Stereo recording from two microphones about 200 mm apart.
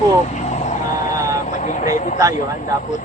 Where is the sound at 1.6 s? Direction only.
40° left (ahead or behind).